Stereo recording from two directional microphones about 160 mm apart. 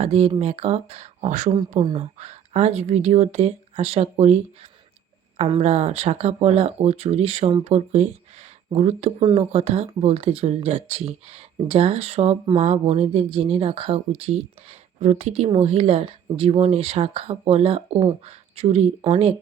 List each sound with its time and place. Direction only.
0.0 s speech: 40° right (ahead or behind)
5.4 s speech: 40° right (ahead or behind)